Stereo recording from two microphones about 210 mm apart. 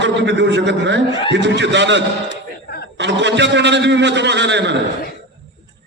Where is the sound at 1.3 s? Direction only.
55° right (ahead or behind).